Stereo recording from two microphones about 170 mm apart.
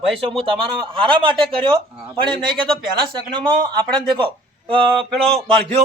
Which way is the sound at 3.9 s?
30° right (ahead or behind).